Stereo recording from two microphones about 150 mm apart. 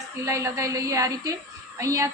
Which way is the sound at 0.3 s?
20° right (ahead or behind).